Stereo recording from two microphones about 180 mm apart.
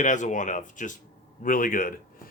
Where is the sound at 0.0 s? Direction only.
45° left (ahead or behind).